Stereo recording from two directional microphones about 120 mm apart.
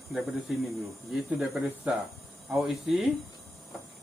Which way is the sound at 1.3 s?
10° right (ahead or behind).